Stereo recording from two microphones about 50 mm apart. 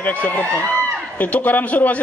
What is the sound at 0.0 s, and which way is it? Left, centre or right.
A man's voice, left.